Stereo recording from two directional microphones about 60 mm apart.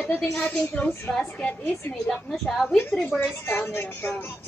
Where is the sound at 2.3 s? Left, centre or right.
Centre.